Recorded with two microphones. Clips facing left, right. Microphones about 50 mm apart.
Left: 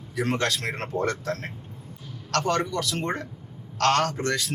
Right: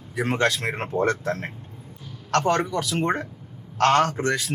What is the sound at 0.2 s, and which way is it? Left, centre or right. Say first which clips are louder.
A man's voice: right 3 dB; centre.